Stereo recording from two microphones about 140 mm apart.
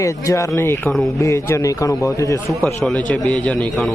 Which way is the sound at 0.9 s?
Centre (ahead or behind).